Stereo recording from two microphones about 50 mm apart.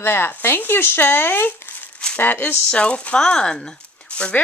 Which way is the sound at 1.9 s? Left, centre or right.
Centre.